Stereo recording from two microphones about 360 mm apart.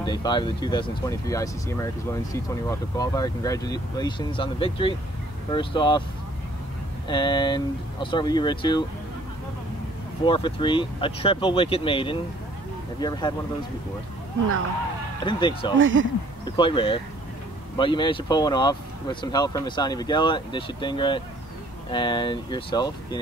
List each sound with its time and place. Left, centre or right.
0.0 s speech: centre
7.1 s speech: centre
10.2 s speech: centre
15.2 s speech: centre
15.8 s speech: right
16.4 s speech: centre